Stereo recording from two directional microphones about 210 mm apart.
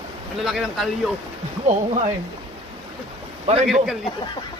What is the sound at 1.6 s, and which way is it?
Speech, 35° right (ahead or behind).